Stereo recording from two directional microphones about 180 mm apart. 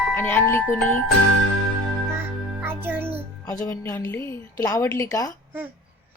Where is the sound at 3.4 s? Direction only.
15° left (ahead or behind).